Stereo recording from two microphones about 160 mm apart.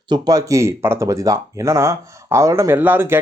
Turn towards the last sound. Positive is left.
turn(degrees=-15)  # may be behind; listen again after turning